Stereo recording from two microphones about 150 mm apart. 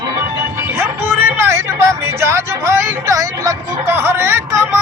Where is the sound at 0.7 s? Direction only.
15° right (ahead or behind).